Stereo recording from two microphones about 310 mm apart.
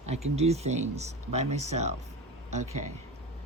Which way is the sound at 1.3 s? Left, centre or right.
Right.